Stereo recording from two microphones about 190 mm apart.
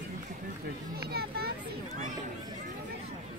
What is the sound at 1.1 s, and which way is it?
Children playing, 55° right (ahead or behind).